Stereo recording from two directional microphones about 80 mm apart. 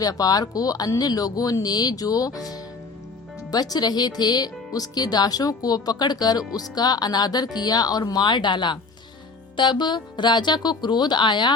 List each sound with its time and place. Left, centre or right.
0.0 s speech: left